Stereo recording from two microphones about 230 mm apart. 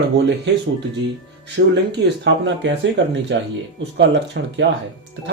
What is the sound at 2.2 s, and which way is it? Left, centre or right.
Speech, right.